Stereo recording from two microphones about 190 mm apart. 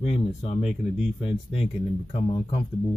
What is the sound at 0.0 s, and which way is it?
Speech, 35° left (ahead or behind).